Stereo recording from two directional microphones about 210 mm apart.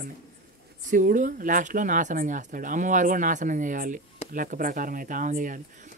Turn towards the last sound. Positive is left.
turn(degrees=-40)  # may be behind; listen again after turning